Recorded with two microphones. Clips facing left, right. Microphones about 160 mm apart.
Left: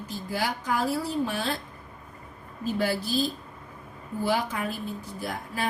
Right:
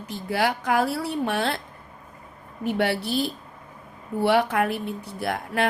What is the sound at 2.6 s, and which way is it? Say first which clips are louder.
A woman's voice: right 3 dB; 70° right (ahead or behind).